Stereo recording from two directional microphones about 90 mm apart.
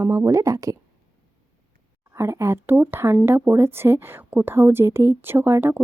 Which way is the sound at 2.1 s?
30° right (ahead or behind).